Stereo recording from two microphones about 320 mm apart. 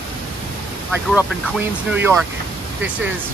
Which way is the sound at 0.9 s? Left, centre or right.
Centre.